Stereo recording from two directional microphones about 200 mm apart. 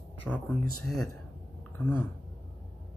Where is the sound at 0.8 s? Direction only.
Centre (ahead or behind).